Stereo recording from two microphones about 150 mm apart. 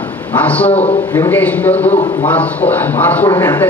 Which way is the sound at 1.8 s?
40° left (ahead or behind).